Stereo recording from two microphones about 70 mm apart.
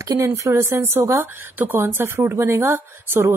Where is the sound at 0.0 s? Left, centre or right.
Right.